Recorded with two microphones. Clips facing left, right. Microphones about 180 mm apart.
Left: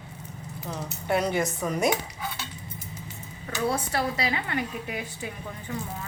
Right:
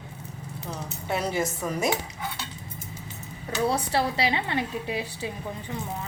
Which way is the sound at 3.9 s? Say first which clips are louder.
Right 2 dB; 25° right (ahead or behind).